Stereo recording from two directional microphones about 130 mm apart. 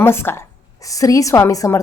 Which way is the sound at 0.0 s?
20° left (ahead or behind).